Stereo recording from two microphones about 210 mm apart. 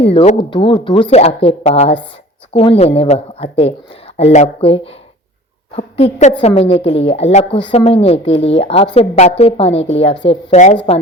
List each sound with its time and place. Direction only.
0.0 s a woman's voice: 25° left (ahead or behind)